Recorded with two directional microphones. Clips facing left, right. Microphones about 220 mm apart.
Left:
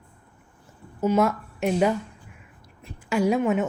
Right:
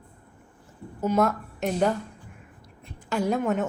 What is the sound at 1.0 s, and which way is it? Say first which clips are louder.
A woman's voice: left 2 dB; 5° left (ahead or behind).